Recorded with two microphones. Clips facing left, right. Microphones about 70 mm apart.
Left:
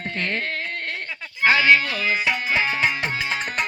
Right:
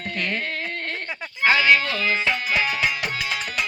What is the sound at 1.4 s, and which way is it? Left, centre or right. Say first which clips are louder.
Music: left 1 dB; left.